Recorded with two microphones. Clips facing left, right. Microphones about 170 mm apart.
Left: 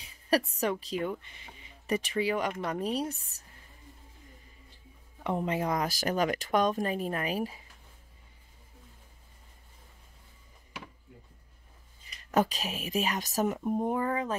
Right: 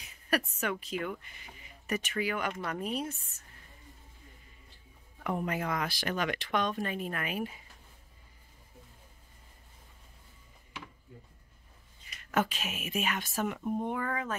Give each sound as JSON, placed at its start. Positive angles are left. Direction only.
{"t": 0.0, "sound": "a woman's voice", "side_deg": 35}
{"t": 5.2, "sound": "speech", "side_deg": 25}
{"t": 12.3, "sound": "speech", "side_deg": 35}